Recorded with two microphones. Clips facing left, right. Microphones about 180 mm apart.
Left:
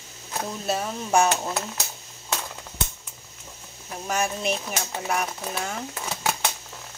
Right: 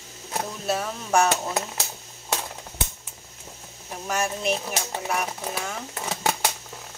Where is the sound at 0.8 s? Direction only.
15° left (ahead or behind).